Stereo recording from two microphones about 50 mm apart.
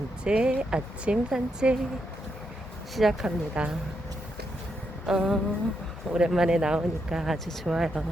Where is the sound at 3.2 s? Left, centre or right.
Right.